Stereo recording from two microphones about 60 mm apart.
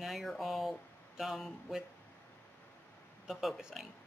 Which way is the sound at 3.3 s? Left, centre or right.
Centre.